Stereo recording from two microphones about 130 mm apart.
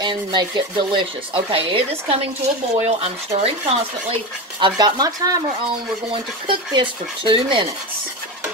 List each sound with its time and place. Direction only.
0.0 s speech: 35° right (ahead or behind)
6.4 s speech: 40° right (ahead or behind)